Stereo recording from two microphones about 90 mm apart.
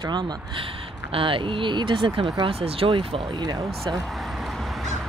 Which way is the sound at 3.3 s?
50° right (ahead or behind).